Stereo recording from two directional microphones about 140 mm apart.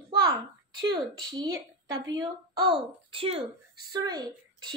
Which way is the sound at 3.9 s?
30° right (ahead or behind).